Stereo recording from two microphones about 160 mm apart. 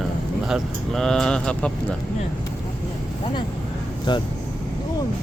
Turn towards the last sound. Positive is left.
turn(degrees=30)  # may be behind; listen again after turning